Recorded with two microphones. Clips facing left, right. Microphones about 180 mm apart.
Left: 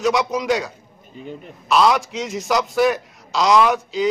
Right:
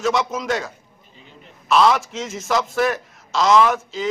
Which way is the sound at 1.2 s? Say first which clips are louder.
Left 16 dB; 50° left (ahead or behind).